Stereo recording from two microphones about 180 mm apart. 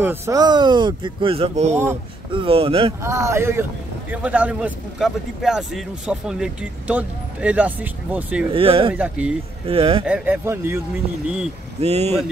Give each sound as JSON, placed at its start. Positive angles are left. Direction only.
{"t": 0.0, "sound": "speech", "side_deg": -15}
{"t": 3.0, "sound": "a man's voice", "side_deg": -15}
{"t": 8.5, "sound": "speech", "side_deg": -30}
{"t": 8.9, "sound": "a man's voice", "side_deg": -10}
{"t": 9.7, "sound": "speech", "side_deg": -30}
{"t": 10.0, "sound": "a man's voice", "side_deg": -10}
{"t": 11.8, "sound": "speech", "side_deg": -35}